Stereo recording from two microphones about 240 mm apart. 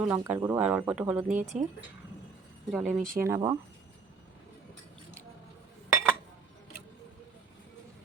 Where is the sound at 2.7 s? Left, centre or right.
Centre.